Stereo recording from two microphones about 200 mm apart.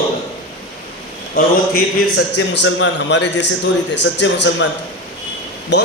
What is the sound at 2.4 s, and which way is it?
A man's voice, 70° left (ahead or behind).